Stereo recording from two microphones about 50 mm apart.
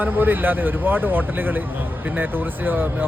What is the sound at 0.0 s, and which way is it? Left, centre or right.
Speech, right.